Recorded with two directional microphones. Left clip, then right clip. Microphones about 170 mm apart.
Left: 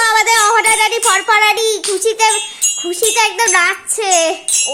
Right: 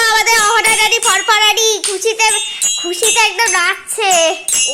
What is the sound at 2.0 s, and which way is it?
Speech, 40° left (ahead or behind).